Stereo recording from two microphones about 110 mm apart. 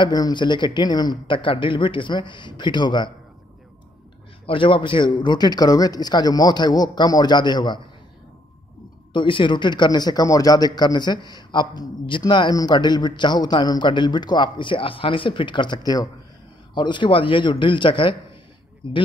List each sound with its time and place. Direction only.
0.0 s a man's voice: 40° left (ahead or behind)
4.5 s a man's voice: 50° left (ahead or behind)
9.1 s a man's voice: 50° left (ahead or behind)